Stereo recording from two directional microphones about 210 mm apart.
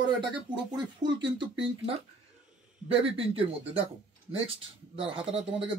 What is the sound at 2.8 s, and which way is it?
Speech, 25° right (ahead or behind).